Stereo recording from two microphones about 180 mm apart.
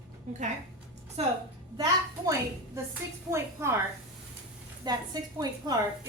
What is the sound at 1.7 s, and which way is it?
A woman's voice, 20° right (ahead or behind).